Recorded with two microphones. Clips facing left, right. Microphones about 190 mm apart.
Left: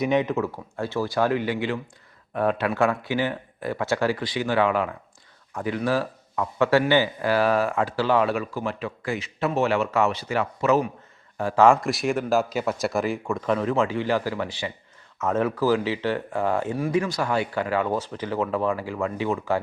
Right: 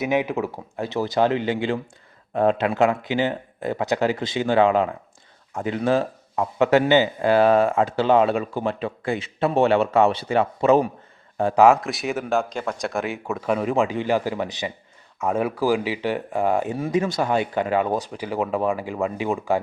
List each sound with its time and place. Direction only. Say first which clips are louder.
0.0 s speech: even; 10° right (ahead or behind); by 10.8 s 30° right (ahead or behind)
11.5 s speech: right 1 dB; 5° right (ahead or behind)